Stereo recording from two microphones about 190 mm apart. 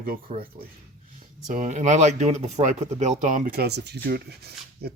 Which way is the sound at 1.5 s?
40° right (ahead or behind).